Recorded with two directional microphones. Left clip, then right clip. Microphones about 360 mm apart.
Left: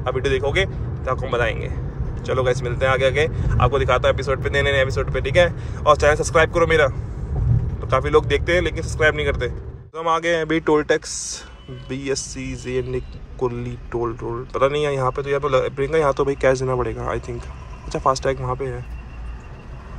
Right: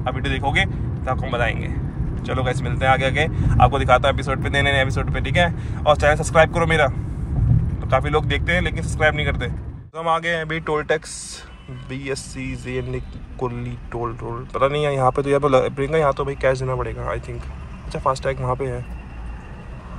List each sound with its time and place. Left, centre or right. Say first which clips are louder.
0.0 s speech: left 3 dB; centre